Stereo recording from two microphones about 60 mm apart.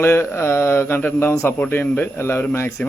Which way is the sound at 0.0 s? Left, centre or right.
Left.